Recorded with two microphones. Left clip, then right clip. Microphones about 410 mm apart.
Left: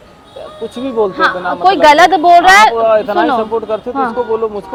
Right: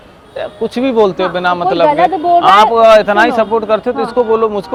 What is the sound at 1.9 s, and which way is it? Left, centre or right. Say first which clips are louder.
Speech: left 4 dB; left.